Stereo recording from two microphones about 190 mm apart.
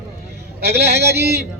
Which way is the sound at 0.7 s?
60° right (ahead or behind).